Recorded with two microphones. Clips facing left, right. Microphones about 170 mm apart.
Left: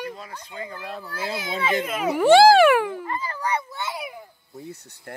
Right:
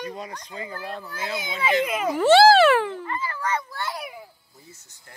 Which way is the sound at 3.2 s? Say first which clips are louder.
Even; 15° left (ahead or behind).